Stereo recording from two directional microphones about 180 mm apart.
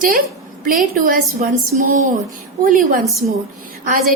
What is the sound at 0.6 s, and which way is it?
Speech, 50° right (ahead or behind).